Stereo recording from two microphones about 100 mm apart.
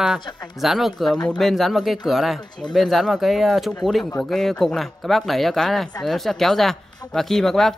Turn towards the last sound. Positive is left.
turn(degrees=5)  # may be behind; listen again after turning